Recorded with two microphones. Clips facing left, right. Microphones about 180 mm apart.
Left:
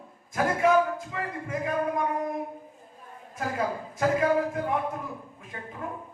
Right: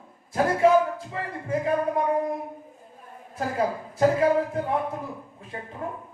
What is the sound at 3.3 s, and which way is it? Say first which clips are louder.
Speech: right 3 dB; 30° right (ahead or behind).